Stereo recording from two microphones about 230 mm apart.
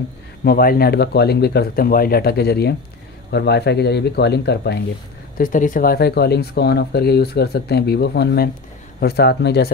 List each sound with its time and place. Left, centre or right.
0.4 s speech: left
5.4 s speech: left